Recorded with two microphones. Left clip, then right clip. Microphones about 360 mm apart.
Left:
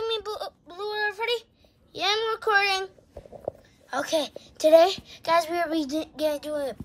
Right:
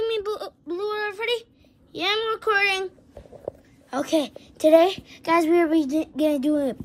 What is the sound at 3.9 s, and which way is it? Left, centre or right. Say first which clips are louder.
Speech: right 2 dB; centre.